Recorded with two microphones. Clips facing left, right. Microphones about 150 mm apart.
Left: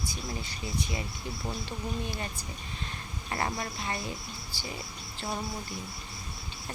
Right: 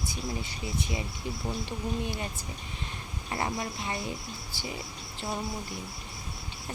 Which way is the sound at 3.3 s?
15° right (ahead or behind).